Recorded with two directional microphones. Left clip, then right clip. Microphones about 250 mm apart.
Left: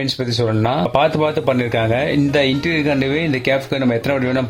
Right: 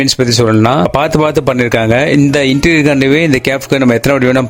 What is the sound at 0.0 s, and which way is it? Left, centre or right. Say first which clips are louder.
Speech: right 9 dB; right.